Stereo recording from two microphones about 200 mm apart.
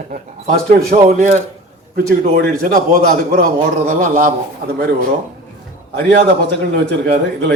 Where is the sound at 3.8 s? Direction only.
45° right (ahead or behind).